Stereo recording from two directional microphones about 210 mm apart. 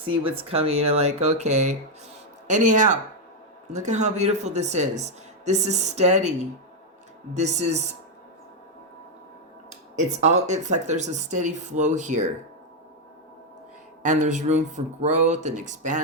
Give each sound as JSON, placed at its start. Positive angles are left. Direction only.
{"t": 0.1, "sound": "speech", "side_deg": -25}
{"t": 7.3, "sound": "speech", "side_deg": -35}
{"t": 10.2, "sound": "speech", "side_deg": -35}
{"t": 14.0, "sound": "speech", "side_deg": -35}